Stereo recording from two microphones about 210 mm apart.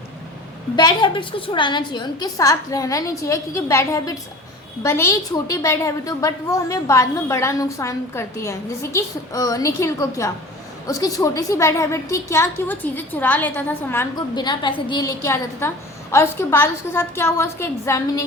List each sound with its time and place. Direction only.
0.8 s a woman's voice: 20° left (ahead or behind)